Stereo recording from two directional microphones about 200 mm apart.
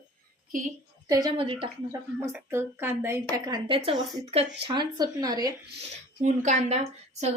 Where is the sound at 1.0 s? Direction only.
20° right (ahead or behind).